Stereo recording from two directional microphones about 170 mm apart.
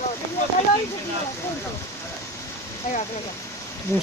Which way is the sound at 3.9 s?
15° left (ahead or behind).